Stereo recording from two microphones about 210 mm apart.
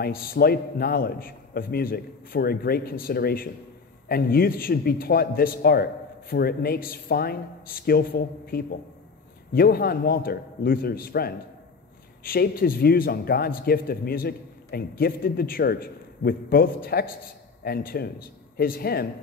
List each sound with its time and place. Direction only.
0.0 s a man's voice: 45° left (ahead or behind)